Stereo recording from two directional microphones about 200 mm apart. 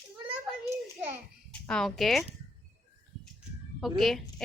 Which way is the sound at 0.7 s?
10° right (ahead or behind).